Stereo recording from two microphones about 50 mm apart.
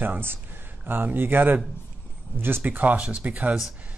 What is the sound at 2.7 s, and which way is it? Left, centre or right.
Speech, right.